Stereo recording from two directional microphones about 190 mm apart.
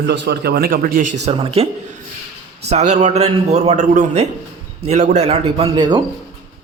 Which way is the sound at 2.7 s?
35° right (ahead or behind).